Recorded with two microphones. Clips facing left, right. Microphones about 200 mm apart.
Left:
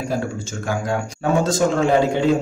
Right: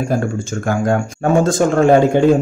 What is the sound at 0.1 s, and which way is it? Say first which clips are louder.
Speech: right 5 dB; 50° right (ahead or behind).